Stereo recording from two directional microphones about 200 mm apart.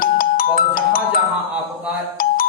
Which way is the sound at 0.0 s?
45° left (ahead or behind).